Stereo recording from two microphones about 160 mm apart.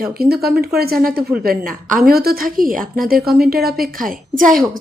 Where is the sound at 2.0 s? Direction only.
70° right (ahead or behind).